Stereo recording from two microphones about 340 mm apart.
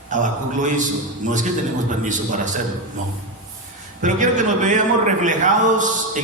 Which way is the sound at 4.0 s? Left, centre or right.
Right.